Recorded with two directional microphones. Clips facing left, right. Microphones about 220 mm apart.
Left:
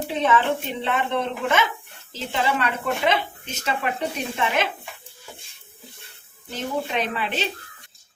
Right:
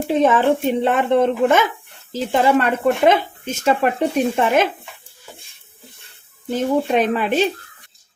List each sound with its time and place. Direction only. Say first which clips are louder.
0.1 s speech: right 7 dB; 45° right (ahead or behind)
6.5 s speech: right 9 dB; 50° right (ahead or behind)